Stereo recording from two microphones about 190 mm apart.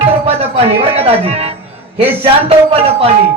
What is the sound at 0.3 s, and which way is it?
Speech, 30° right (ahead or behind).